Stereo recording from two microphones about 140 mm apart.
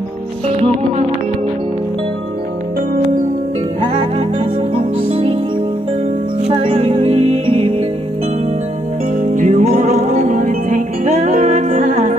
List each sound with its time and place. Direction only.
4.7 s music: 45° right (ahead or behind)
6.4 s music: 40° right (ahead or behind)
9.2 s music: 65° right (ahead or behind)